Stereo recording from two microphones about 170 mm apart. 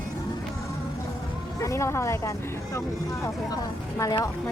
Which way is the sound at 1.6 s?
15° left (ahead or behind).